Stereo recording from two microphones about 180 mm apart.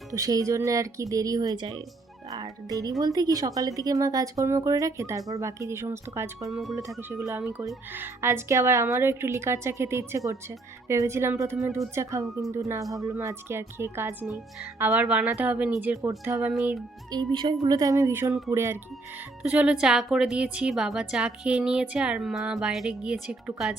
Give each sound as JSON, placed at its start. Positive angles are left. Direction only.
{"t": 0.1, "sound": "speech", "side_deg": -20}
{"t": 6.5, "sound": "a woman's voice", "side_deg": 0}
{"t": 6.7, "sound": "speech", "side_deg": -15}
{"t": 17.1, "sound": "a woman's voice", "side_deg": -25}